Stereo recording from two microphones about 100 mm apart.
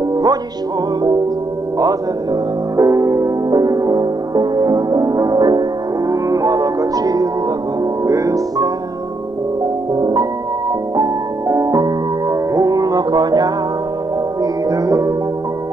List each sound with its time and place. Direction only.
0.1 s music: 40° right (ahead or behind)
2.7 s music: 35° right (ahead or behind)
9.9 s music: 45° right (ahead or behind)